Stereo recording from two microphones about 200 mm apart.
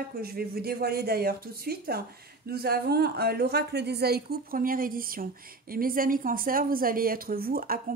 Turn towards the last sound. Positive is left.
turn(degrees=-50)  # may be behind; listen again after turning